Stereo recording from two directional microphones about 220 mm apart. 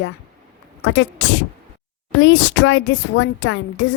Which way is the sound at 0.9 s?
55° left (ahead or behind).